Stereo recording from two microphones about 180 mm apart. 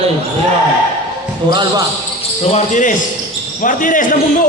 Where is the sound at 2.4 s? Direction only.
40° left (ahead or behind).